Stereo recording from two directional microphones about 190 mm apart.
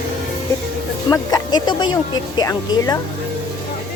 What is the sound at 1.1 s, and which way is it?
Speech, 20° left (ahead or behind).